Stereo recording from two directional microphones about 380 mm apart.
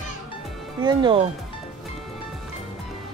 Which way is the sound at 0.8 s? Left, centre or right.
Centre.